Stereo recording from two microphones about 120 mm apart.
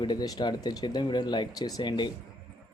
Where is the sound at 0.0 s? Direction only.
35° left (ahead or behind).